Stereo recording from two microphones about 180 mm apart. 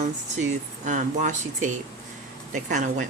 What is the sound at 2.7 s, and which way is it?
Speech, 45° right (ahead or behind).